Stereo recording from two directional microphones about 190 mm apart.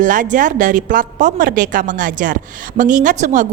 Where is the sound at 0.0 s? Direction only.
45° right (ahead or behind).